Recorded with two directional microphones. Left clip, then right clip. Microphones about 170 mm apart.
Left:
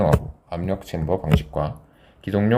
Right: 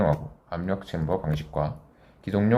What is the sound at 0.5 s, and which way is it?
Speech, 30° left (ahead or behind).